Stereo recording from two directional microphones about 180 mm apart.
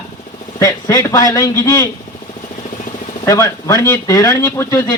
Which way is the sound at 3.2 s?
15° left (ahead or behind).